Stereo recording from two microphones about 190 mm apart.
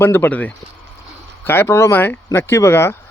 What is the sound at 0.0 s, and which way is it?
Speech, 10° left (ahead or behind).